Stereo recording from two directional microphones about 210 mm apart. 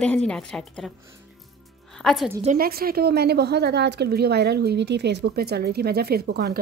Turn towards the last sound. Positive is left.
turn(degrees=-50)  # may be behind; listen again after turning